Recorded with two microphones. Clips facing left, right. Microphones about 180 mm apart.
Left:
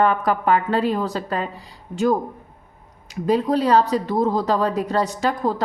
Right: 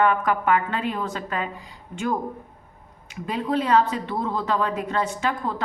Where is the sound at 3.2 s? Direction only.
40° left (ahead or behind).